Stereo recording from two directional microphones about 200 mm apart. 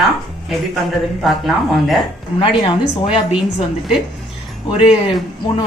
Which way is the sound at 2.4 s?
25° left (ahead or behind).